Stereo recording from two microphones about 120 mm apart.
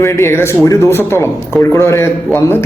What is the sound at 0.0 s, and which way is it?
A man's voice, 25° left (ahead or behind).